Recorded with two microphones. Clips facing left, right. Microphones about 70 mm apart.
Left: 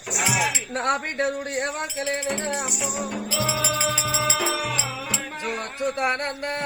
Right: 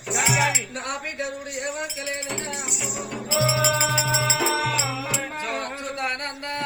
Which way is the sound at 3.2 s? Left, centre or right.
Right.